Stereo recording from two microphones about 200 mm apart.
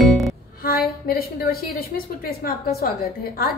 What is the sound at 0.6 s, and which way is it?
A woman's voice, 50° left (ahead or behind).